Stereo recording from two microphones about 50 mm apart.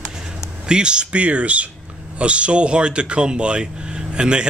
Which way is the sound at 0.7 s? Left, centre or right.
Centre.